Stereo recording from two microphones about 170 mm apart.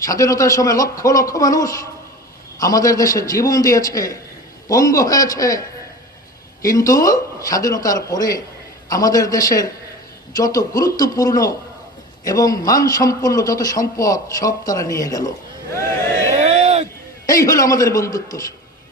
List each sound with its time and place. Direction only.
0.0 s a man's voice: 20° left (ahead or behind)
16.4 s a sound: 40° right (ahead or behind)
17.2 s a man's voice: 20° left (ahead or behind)